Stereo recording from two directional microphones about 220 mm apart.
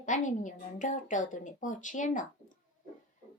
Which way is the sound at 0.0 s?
35° left (ahead or behind).